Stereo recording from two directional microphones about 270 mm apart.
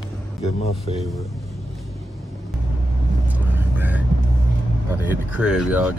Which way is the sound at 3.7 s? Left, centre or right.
Centre.